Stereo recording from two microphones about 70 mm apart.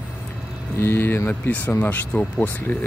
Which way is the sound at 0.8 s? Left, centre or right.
Left.